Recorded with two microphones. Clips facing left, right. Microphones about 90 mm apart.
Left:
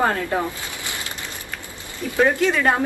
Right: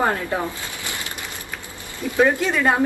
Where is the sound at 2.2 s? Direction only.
5° right (ahead or behind).